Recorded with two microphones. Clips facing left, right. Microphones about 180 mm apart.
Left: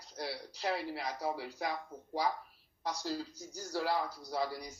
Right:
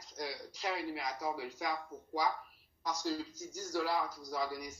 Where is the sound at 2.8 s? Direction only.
35° left (ahead or behind).